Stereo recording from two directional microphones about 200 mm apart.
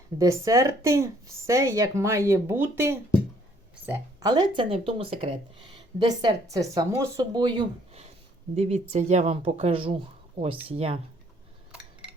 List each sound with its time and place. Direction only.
0.2 s speech: 15° right (ahead or behind)